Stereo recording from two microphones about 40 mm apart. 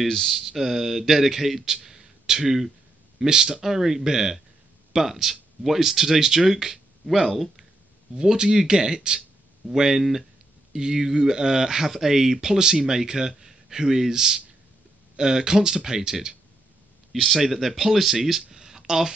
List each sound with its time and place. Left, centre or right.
0.0 s speech: centre
8.2 s speech: centre
17.1 s speech: centre
18.5 s a sound: centre